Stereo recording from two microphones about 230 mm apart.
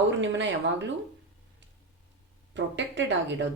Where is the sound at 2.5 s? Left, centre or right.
Right.